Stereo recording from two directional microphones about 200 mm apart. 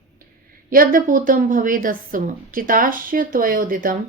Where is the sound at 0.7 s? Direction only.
45° right (ahead or behind).